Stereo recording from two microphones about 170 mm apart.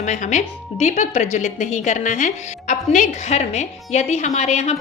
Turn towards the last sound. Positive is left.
turn(degrees=40)  # may be behind; listen again after turning